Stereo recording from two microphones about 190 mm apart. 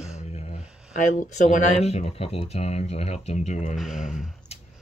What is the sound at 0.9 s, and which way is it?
Speech, 40° left (ahead or behind).